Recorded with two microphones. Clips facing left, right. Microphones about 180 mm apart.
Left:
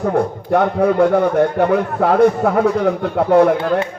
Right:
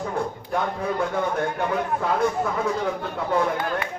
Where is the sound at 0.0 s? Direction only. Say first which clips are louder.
Left 10 dB; 65° left (ahead or behind).